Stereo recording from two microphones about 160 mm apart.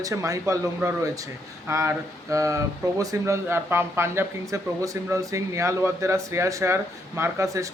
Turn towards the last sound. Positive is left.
turn(degrees=-20)  # may be behind; listen again after turning